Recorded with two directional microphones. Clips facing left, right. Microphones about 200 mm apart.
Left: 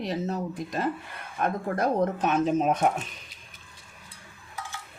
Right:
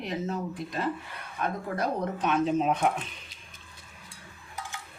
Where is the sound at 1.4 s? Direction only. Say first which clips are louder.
Left 4 dB; 50° left (ahead or behind).